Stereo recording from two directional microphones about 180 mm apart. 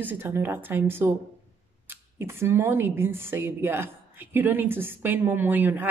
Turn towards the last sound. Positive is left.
turn(degrees=-10)  # may be behind; listen again after turning